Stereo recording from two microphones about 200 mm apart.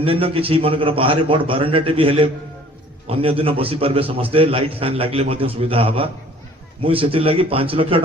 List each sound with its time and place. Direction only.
0.0 s a man's voice: 30° right (ahead or behind)